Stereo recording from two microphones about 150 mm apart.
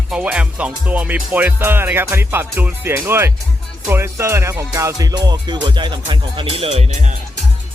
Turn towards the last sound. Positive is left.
turn(degrees=-45)  # may be behind; listen again after turning